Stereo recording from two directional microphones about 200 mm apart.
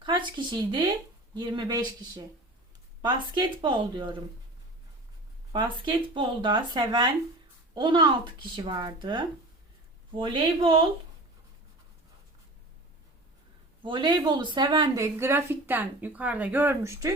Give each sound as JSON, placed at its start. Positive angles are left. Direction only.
{"t": 0.0, "sound": "speech", "side_deg": -25}
{"t": 5.5, "sound": "speech", "side_deg": -25}
{"t": 13.8, "sound": "a woman's voice", "side_deg": -25}